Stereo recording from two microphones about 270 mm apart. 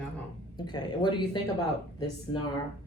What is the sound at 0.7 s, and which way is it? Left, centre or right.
Speech, centre.